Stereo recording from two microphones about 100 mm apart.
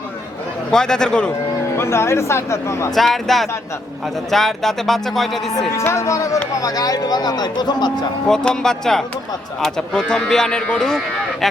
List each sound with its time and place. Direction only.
0.7 s a man's voice: 5° left (ahead or behind)
1.7 s speech: 25° left (ahead or behind)
2.9 s speech: centre (ahead or behind)
5.8 s speech: 30° left (ahead or behind); by 7.9 s 45° left (ahead or behind)
8.3 s speech: 5° left (ahead or behind)